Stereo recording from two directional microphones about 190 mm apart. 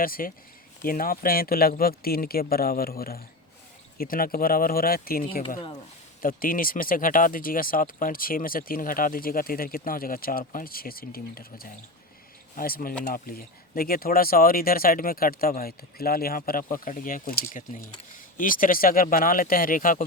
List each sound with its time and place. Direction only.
0.0 s speech: 50° left (ahead or behind)